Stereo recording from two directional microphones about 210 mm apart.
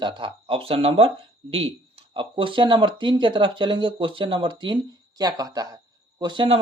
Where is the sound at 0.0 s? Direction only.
25° right (ahead or behind).